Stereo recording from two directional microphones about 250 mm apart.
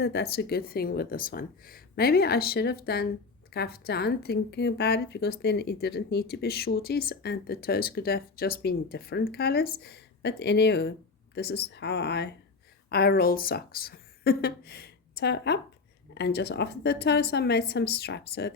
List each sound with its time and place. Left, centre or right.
0.0 s a woman's voice: left